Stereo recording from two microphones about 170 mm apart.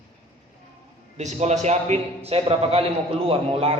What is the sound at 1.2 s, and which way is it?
A man's voice, 40° right (ahead or behind).